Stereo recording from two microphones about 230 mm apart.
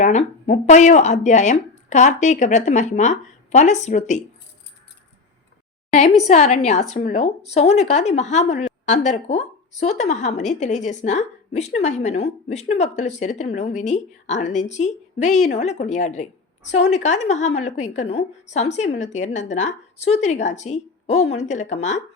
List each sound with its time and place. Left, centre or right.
0.0 s a woman's voice: left
6.2 s a woman's voice: left